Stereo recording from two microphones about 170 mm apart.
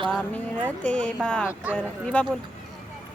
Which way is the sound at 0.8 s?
5° left (ahead or behind).